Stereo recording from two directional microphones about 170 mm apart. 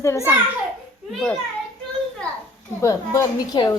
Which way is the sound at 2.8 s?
20° left (ahead or behind).